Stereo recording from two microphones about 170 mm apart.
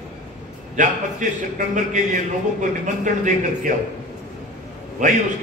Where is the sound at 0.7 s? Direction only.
50° right (ahead or behind).